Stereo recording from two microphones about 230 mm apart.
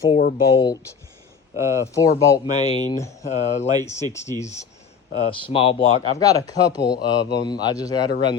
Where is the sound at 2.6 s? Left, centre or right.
Left.